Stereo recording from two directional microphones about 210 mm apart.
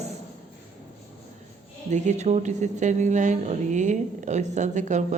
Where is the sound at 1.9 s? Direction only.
35° right (ahead or behind).